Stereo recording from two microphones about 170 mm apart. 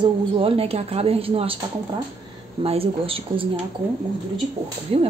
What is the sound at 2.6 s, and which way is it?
Speech, 35° right (ahead or behind).